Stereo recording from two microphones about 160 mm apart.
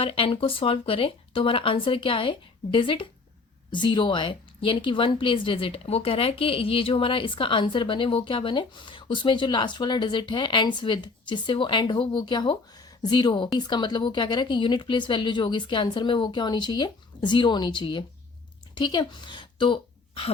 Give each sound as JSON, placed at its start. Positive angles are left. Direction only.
{"t": 0.0, "sound": "a woman's voice", "side_deg": 35}